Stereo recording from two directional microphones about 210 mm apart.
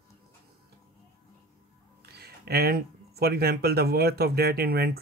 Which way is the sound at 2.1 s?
50° right (ahead or behind).